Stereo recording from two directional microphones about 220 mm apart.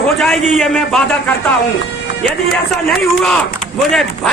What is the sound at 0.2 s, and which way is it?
Speech, centre (ahead or behind).